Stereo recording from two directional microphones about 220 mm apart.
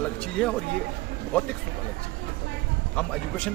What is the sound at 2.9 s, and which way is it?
Speech, 5° left (ahead or behind).